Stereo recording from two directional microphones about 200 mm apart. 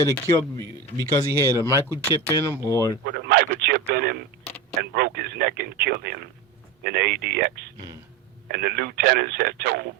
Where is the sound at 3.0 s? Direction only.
50° right (ahead or behind).